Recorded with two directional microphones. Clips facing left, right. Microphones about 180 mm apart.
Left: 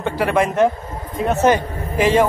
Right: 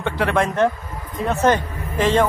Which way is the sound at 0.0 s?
5° left (ahead or behind).